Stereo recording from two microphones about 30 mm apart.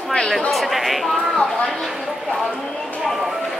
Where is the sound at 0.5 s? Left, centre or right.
Centre.